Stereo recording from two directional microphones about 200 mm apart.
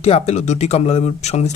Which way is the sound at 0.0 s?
30° left (ahead or behind).